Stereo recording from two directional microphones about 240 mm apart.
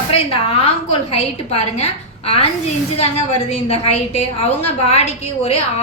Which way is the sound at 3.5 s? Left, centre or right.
Left.